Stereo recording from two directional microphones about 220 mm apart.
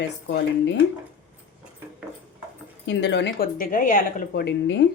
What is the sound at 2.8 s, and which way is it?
Speech, 50° left (ahead or behind).